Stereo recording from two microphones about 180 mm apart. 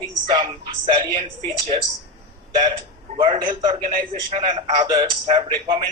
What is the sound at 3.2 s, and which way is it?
A man's voice, 25° right (ahead or behind).